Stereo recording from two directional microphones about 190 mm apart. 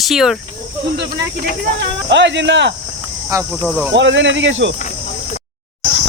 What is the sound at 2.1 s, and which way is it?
Speech, 70° right (ahead or behind).